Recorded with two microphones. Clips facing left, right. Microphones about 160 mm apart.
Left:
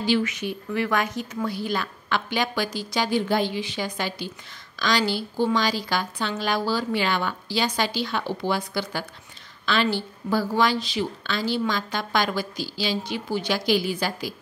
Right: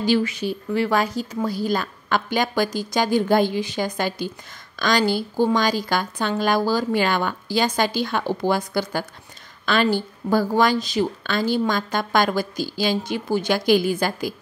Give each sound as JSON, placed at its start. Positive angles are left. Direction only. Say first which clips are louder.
{"t": 0.0, "sound": "a woman's voice", "louder": "right 3 dB", "side_deg": -40}